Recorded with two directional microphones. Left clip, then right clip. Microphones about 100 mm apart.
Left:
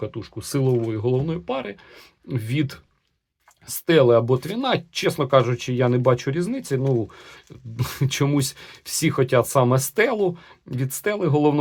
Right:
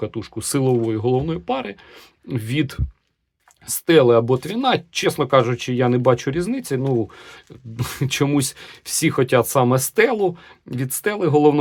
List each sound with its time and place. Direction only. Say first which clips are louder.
0.1 s speech: right 4 dB; 65° right (ahead or behind); by 2.8 s 40° right (ahead or behind)
3.8 s speech: right 2 dB; 35° right (ahead or behind)